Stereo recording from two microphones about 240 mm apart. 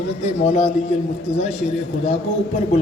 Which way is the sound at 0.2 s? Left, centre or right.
Left.